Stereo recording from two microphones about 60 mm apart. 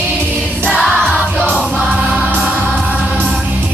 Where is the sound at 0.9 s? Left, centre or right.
Centre.